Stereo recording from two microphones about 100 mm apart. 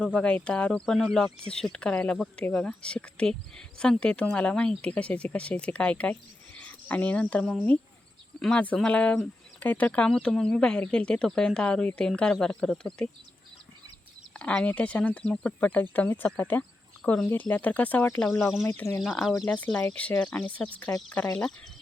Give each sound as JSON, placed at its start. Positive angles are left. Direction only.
{"t": 0.0, "sound": "speech", "side_deg": 10}
{"t": 14.3, "sound": "speech", "side_deg": 15}
{"t": 18.6, "sound": "speech", "side_deg": 30}
{"t": 19.2, "sound": "speech", "side_deg": 0}
{"t": 19.5, "sound": "speech", "side_deg": 15}